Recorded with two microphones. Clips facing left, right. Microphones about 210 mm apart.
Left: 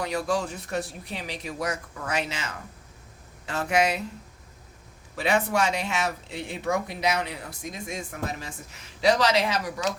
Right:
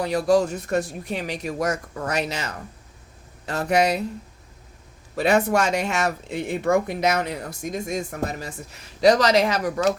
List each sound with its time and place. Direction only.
0.0 s speech: 35° right (ahead or behind)
5.1 s speech: 45° right (ahead or behind)